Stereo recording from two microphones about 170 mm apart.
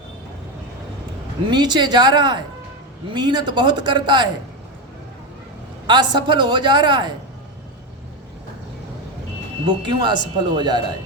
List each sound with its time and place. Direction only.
1.5 s a man's voice: 25° right (ahead or behind)
5.9 s a man's voice: 25° right (ahead or behind)
9.6 s a man's voice: 25° right (ahead or behind)